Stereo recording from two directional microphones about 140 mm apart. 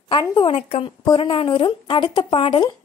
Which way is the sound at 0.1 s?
35° left (ahead or behind).